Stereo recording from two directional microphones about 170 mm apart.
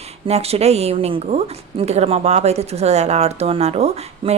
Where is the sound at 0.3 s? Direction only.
35° right (ahead or behind).